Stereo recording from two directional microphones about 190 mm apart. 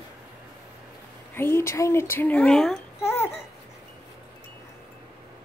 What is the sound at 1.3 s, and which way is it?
A woman's voice, 15° left (ahead or behind).